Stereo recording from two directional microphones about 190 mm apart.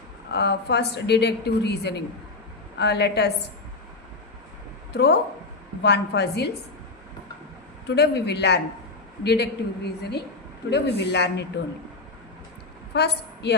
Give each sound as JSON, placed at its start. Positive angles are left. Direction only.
{"t": 0.3, "sound": "a woman's voice", "side_deg": 60}
{"t": 4.9, "sound": "a woman's voice", "side_deg": 60}
{"t": 7.9, "sound": "a woman's voice", "side_deg": 60}
{"t": 12.9, "sound": "a woman's voice", "side_deg": 60}